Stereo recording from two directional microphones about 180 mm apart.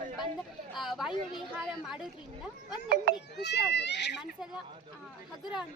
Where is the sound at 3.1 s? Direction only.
65° right (ahead or behind).